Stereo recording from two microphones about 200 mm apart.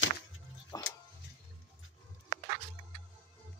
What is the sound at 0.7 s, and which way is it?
Music, 15° left (ahead or behind).